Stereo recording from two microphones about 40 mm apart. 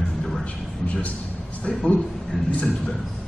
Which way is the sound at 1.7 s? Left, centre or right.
Left.